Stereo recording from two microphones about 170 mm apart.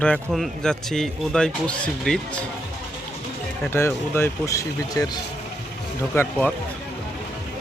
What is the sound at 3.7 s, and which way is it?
Speech, 15° left (ahead or behind).